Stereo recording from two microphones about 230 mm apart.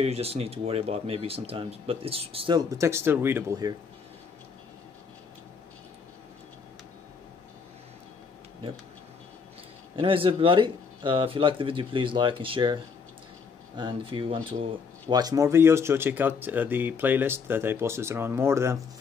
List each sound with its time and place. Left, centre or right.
0.0 s speech: right
9.9 s speech: right
13.7 s speech: right